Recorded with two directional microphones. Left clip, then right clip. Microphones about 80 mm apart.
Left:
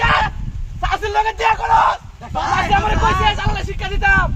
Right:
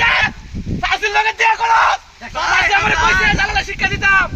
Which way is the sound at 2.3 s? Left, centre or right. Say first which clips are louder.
Right 3 dB; left.